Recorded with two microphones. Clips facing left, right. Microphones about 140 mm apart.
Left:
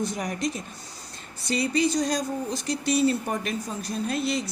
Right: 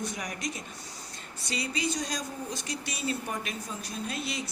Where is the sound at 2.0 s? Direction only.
35° left (ahead or behind).